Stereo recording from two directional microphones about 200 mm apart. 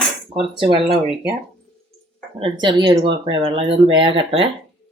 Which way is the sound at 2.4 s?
25° right (ahead or behind).